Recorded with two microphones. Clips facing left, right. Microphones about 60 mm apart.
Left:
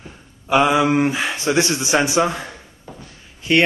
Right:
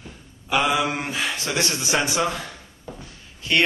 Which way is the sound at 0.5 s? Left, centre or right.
Left.